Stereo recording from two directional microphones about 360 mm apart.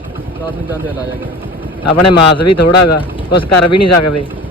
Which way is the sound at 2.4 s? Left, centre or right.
Left.